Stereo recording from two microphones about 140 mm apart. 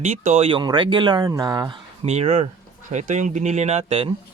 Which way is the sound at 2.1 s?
50° right (ahead or behind).